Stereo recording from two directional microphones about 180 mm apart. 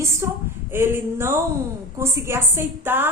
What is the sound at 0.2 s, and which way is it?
A woman's voice, 15° right (ahead or behind).